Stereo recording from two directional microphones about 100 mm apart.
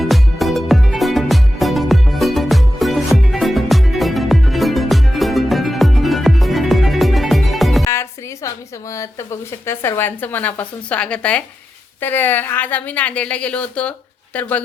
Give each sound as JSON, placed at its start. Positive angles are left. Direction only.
{"t": 0.0, "sound": "music", "side_deg": 0}
{"t": 7.9, "sound": "a woman's voice", "side_deg": 30}